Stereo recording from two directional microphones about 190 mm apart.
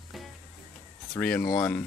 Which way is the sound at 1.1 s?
5° left (ahead or behind).